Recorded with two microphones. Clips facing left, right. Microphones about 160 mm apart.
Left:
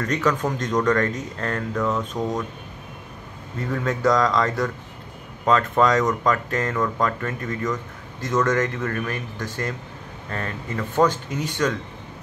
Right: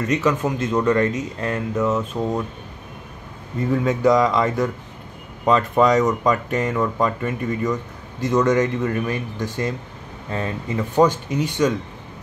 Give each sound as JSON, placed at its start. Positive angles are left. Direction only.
{"t": 0.0, "sound": "speech", "side_deg": -5}
{"t": 3.6, "sound": "speech", "side_deg": -15}